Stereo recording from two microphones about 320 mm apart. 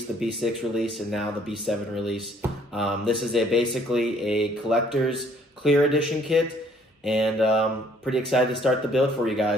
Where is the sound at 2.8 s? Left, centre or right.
Centre.